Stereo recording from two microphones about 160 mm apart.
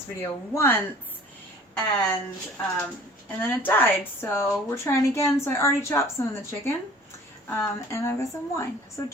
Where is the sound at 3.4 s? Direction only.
15° left (ahead or behind).